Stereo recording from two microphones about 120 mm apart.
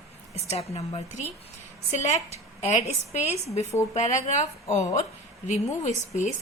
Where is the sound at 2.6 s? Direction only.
65° left (ahead or behind).